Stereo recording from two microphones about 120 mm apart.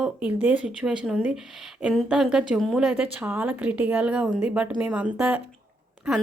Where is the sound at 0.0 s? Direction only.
10° right (ahead or behind).